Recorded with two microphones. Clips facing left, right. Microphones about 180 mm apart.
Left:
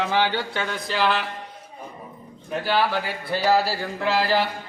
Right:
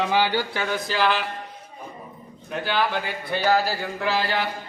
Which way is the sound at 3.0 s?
Centre (ahead or behind).